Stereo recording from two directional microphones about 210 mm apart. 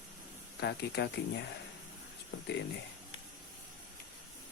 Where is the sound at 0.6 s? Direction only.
55° left (ahead or behind).